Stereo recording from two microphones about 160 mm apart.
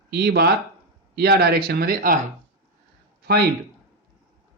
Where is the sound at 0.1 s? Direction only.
85° right; by 2.1 s 65° right (ahead or behind).